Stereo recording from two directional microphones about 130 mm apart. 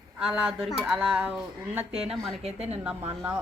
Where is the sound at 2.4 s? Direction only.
50° right (ahead or behind).